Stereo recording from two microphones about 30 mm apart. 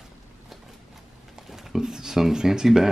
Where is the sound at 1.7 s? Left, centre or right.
Right.